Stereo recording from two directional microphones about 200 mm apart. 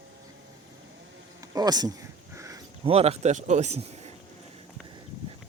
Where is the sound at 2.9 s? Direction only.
30° right (ahead or behind).